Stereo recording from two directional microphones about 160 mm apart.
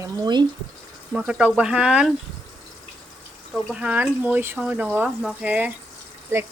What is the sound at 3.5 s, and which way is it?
Speech, 5° right (ahead or behind).